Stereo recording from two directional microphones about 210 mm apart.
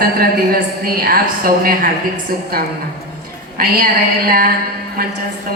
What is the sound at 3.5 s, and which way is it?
Speech, 45° right (ahead or behind).